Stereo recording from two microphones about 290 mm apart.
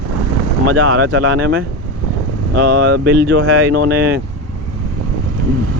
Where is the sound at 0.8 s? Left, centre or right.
Right.